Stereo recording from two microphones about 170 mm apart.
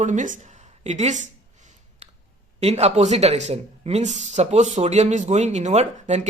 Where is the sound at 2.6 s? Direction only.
40° right (ahead or behind).